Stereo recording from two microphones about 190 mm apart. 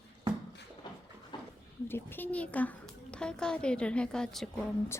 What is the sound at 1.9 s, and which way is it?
A woman's voice, 10° left (ahead or behind).